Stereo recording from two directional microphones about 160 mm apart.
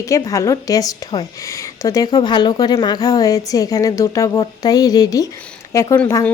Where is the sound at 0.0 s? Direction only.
20° left (ahead or behind).